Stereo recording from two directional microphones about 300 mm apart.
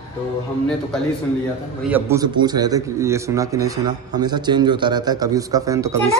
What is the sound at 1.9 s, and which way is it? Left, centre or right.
A man's voice, centre.